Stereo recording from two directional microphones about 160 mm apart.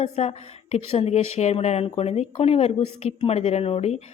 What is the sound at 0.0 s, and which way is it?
A woman's voice, 40° left (ahead or behind).